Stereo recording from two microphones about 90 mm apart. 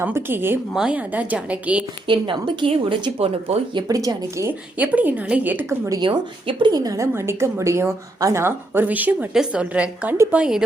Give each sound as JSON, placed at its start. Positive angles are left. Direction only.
{"t": 0.0, "sound": "a woman's voice", "side_deg": -25}
{"t": 0.7, "sound": "speech", "side_deg": -5}
{"t": 0.9, "sound": "a woman's voice", "side_deg": -15}
{"t": 2.0, "sound": "a woman's voice", "side_deg": -65}
{"t": 3.8, "sound": "speech", "side_deg": -45}
{"t": 4.4, "sound": "a woman's voice", "side_deg": -15}
{"t": 5.6, "sound": "speech", "side_deg": -30}
{"t": 6.0, "sound": "a woman's voice", "side_deg": -65}
{"t": 7.1, "sound": "a woman's voice", "side_deg": -30}
{"t": 9.3, "sound": "a woman's voice", "side_deg": -10}